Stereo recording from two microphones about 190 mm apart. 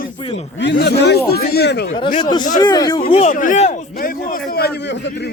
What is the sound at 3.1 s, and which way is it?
Speech, 35° left (ahead or behind).